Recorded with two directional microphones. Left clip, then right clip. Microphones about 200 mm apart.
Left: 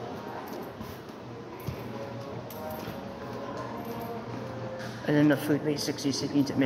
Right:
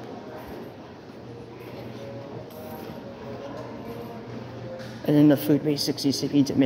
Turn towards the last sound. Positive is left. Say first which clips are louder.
# right 5 dB
turn(degrees=-60)  # may be behind; listen again after turning